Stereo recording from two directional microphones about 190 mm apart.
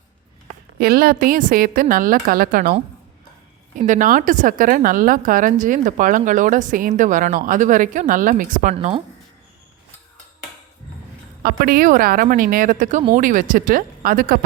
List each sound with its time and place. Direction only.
0.8 s a woman's voice: 50° right (ahead or behind)
3.8 s a woman's voice: 40° right (ahead or behind)
8.7 s speech: 30° right (ahead or behind)
11.4 s a woman's voice: 50° right (ahead or behind)